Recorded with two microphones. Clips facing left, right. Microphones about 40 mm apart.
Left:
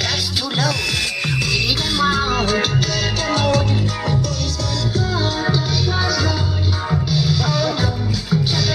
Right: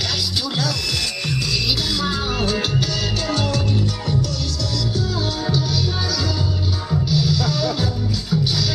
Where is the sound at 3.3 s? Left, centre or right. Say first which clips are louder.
Left 6 dB; left.